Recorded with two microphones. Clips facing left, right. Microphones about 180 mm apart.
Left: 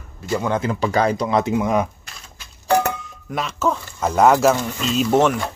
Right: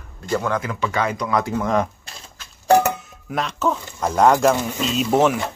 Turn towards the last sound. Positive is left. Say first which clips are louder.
# left 1 dB
turn(degrees=0)  # may be behind; listen again after turning